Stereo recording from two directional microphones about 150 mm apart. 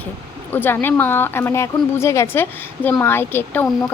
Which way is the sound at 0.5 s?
15° left (ahead or behind).